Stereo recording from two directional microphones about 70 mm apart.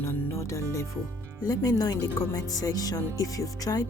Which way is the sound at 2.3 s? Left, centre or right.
Left.